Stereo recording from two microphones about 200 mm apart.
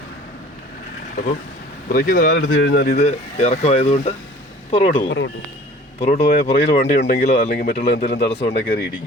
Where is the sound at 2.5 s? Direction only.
55° left (ahead or behind).